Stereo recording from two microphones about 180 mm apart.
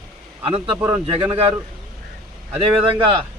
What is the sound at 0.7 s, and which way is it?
Speech, 10° right (ahead or behind).